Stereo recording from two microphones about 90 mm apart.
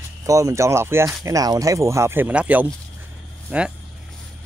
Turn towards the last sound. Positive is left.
turn(degrees=-25)  # may be behind; listen again after turning